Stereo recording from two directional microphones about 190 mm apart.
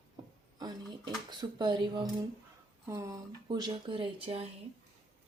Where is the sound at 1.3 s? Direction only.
25° right (ahead or behind).